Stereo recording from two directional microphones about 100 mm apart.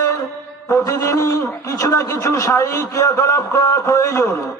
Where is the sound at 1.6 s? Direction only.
35° left (ahead or behind).